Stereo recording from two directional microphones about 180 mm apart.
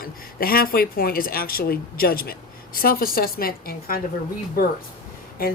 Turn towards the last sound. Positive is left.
turn(degrees=55)  # may be behind; listen again after turning